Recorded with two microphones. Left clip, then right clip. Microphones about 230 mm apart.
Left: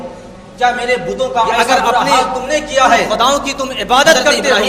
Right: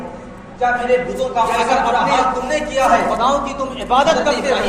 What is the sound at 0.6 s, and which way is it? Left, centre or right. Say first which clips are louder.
A man's voice: left 2 dB; left.